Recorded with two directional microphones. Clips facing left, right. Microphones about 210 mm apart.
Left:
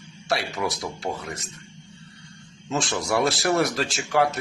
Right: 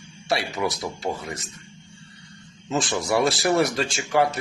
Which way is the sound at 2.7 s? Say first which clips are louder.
Right 2 dB; centre (ahead or behind).